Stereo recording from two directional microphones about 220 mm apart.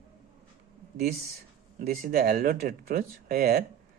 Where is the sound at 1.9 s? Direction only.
45° right (ahead or behind).